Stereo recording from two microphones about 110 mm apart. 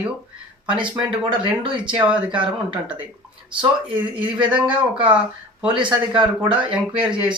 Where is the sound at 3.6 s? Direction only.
50° right (ahead or behind).